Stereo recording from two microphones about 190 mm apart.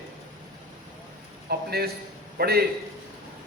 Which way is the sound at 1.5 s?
55° right (ahead or behind).